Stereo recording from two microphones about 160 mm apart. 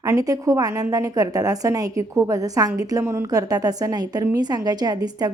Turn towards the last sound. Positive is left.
turn(degrees=-25)  # may be behind; listen again after turning